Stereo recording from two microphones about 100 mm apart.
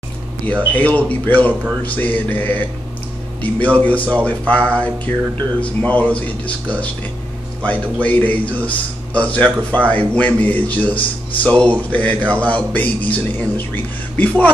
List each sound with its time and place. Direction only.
0.7 s a man's voice: 15° left (ahead or behind)
2.0 s mantra: 20° left (ahead or behind)
3.4 s a man's voice: 15° left (ahead or behind)